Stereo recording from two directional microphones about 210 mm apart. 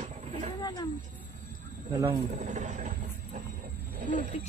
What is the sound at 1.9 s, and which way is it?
Speech, 20° right (ahead or behind).